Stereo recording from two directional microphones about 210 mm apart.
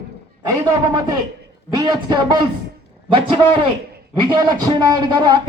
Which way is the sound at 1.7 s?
20° right (ahead or behind).